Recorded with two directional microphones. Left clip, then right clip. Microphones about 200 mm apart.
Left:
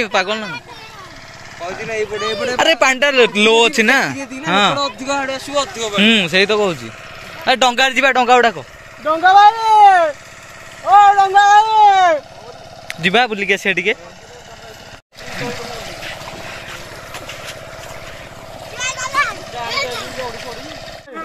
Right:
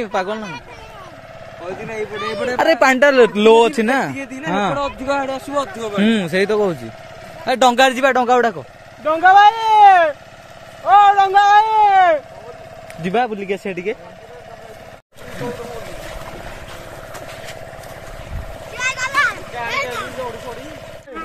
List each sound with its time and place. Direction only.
0.0 s speech: 5° right (ahead or behind)
2.2 s speech: 5° right (ahead or behind)
2.5 s a man's voice: 15° right (ahead or behind)
3.8 s speech: 5° right (ahead or behind)
5.1 s speech: 50° right (ahead or behind)
6.0 s speech: 10° right (ahead or behind)
9.5 s cat: 10° left (ahead or behind)
10.9 s a sound: 10° left (ahead or behind)
11.7 s speech: 40° left (ahead or behind)
12.8 s speech: 10° left (ahead or behind)
18.8 s vehicle: 20° left (ahead or behind)
19.7 s boat: 5° left (ahead or behind)